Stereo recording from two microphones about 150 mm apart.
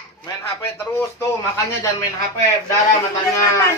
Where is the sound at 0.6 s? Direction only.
20° left (ahead or behind).